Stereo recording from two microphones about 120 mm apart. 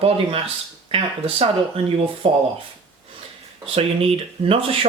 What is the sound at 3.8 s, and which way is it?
Speech, 55° right (ahead or behind).